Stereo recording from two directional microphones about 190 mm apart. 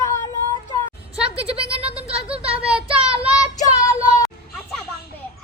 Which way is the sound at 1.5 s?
30° right (ahead or behind).